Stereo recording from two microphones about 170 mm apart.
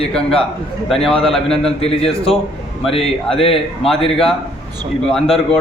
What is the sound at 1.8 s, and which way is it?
Speech, 35° left (ahead or behind).